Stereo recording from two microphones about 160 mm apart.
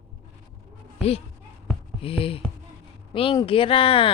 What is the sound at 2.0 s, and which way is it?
Speech, 35° left (ahead or behind).